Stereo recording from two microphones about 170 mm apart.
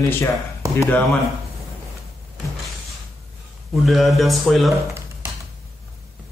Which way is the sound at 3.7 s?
Centre (ahead or behind).